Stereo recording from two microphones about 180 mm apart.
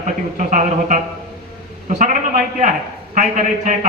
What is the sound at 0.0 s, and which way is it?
A man's voice, 45° right (ahead or behind).